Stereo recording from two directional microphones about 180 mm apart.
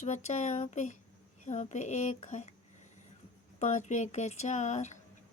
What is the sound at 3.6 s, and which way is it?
Speech, 40° left (ahead or behind).